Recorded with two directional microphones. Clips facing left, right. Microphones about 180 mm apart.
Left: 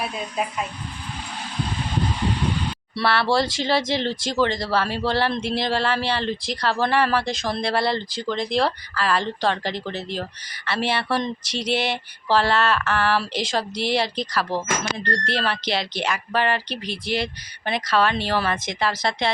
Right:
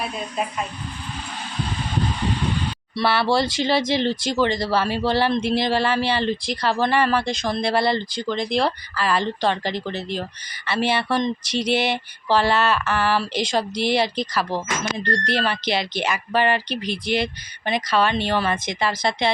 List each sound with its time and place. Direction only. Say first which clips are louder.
0.0 s speech: even; centre (ahead or behind)
2.9 s speech: right 1 dB; centre (ahead or behind)